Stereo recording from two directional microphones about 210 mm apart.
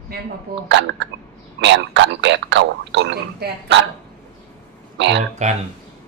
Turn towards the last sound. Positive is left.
turn(degrees=-35)  # may be behind; listen again after turning